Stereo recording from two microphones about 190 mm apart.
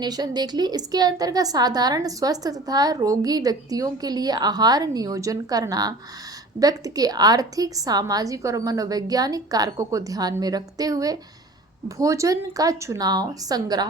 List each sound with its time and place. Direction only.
0.0 s a woman's voice: 20° right (ahead or behind)